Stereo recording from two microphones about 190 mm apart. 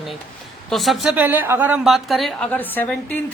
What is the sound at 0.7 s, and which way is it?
A woman's voice, centre (ahead or behind).